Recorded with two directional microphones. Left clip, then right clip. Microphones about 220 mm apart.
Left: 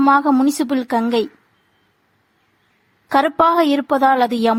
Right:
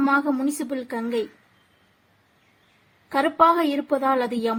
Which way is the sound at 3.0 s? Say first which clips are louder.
Left 4 dB; 45° left (ahead or behind).